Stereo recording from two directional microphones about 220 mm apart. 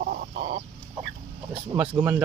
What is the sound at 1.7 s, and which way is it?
Speech, 5° right (ahead or behind).